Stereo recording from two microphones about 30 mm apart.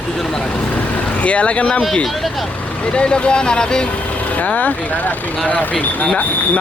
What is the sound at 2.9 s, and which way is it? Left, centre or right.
Speech, left.